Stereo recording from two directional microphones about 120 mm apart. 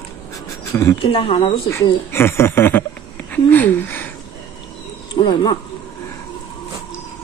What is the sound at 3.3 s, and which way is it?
Speech, 15° left (ahead or behind).